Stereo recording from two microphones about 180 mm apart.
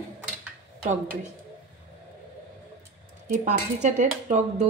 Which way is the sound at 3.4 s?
40° right (ahead or behind).